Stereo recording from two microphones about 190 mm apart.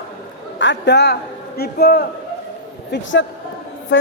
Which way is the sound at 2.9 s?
80° left.